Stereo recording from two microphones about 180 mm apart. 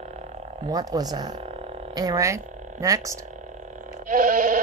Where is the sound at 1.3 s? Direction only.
35° right (ahead or behind).